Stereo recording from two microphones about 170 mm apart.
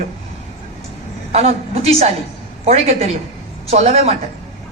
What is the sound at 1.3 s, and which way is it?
Speech, 35° right (ahead or behind).